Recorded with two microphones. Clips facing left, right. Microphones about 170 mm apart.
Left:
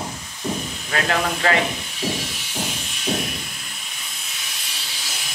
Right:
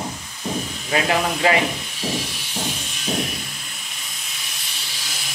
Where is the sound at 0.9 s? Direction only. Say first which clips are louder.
Right 2 dB; 15° right (ahead or behind).